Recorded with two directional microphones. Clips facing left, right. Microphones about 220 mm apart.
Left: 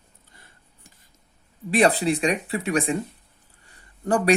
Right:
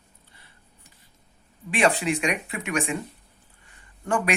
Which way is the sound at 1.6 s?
35° left (ahead or behind).